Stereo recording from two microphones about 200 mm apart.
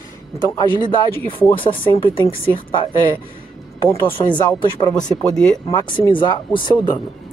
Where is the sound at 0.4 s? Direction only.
20° left (ahead or behind).